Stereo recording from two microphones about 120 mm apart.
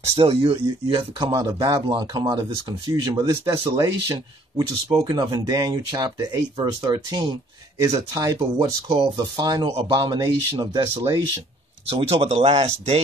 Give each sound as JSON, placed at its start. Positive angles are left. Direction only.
{"t": 0.1, "sound": "speech", "side_deg": -50}
{"t": 11.9, "sound": "speech", "side_deg": -55}